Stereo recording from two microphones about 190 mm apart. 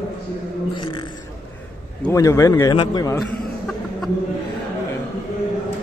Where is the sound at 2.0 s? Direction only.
15° left (ahead or behind).